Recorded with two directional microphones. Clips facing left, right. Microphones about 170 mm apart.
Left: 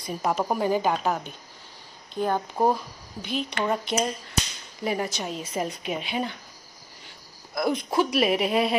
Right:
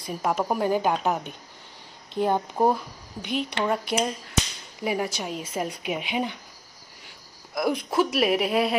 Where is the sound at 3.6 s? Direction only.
5° right (ahead or behind).